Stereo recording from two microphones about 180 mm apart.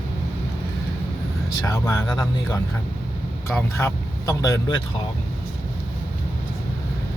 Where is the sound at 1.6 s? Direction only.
20° left (ahead or behind).